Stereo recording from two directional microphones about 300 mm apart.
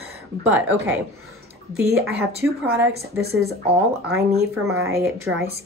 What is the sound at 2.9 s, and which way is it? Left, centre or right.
Speech, right.